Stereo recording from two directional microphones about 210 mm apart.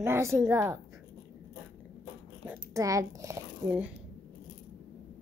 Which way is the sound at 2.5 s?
15° right (ahead or behind).